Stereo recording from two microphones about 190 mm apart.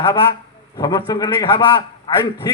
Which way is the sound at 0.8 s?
20° left (ahead or behind).